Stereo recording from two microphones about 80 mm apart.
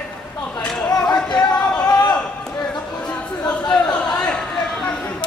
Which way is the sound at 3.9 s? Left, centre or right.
Centre.